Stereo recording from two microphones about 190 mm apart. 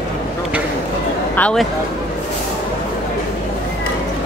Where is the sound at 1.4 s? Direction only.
5° left (ahead or behind).